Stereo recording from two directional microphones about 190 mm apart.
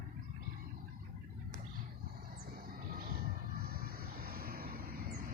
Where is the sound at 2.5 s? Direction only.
50° right (ahead or behind).